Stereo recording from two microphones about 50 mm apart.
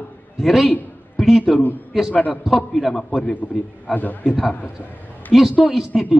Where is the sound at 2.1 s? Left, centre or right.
Left.